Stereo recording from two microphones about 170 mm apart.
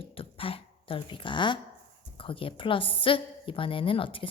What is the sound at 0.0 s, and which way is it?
Throat clearing, 35° left (ahead or behind).